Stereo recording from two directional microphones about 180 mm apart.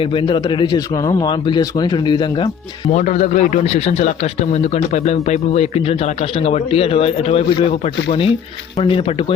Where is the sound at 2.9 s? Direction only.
45° left (ahead or behind).